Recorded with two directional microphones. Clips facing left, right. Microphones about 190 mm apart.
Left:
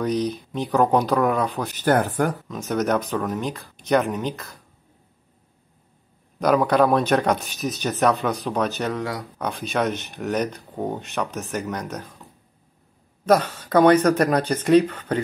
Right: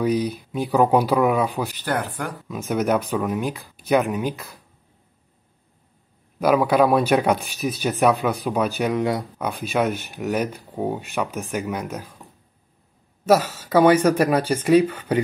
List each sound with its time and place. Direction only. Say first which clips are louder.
0.0 s speech: right 2 dB; 10° right (ahead or behind)
1.8 s speech: left 11 dB; 45° left (ahead or behind)
2.4 s speech: right 1 dB; 10° right (ahead or behind)
6.4 s speech: right 1 dB; 5° right (ahead or behind)
13.2 s speech: right 1 dB; 5° right (ahead or behind)